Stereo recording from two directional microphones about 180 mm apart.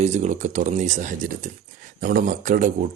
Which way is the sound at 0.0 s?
40° right (ahead or behind).